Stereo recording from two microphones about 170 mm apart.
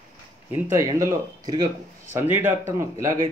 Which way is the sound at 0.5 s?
15° right (ahead or behind).